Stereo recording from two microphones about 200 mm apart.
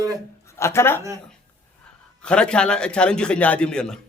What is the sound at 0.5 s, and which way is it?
Speech, 15° left (ahead or behind).